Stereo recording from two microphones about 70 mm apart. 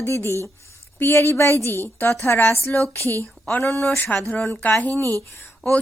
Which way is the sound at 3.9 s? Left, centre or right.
Left.